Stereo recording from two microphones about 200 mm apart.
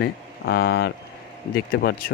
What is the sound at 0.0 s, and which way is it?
Speech, 55° left (ahead or behind).